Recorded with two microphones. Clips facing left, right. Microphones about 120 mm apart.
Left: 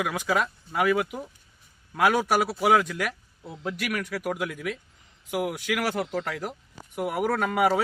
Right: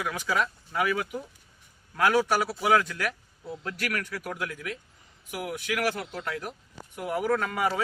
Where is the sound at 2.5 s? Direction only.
15° left (ahead or behind).